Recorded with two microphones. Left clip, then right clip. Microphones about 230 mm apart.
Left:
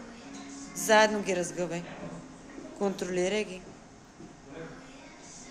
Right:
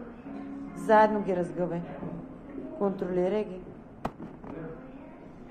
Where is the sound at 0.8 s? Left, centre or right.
Left.